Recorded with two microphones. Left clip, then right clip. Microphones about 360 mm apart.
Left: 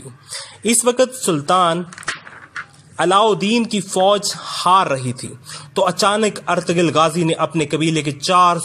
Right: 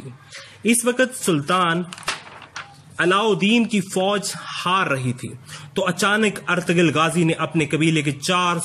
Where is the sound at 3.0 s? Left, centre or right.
Centre.